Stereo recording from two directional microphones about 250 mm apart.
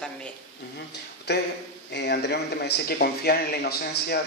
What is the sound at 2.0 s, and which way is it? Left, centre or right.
A man's voice, left.